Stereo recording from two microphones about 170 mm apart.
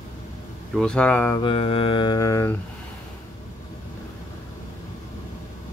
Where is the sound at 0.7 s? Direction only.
5° left (ahead or behind).